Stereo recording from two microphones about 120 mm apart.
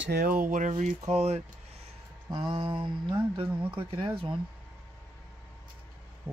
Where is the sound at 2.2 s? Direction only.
45° right (ahead or behind).